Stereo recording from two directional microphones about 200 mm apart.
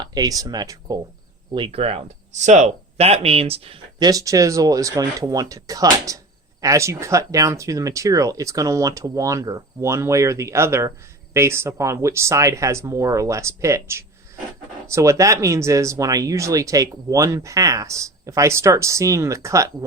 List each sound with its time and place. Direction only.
0.0 s speech: 20° right (ahead or behind)